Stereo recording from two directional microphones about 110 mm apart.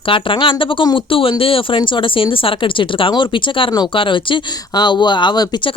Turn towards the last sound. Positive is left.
turn(degrees=45)  # may be behind; listen again after turning